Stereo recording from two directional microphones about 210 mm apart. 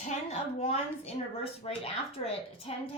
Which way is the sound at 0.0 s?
30° left (ahead or behind).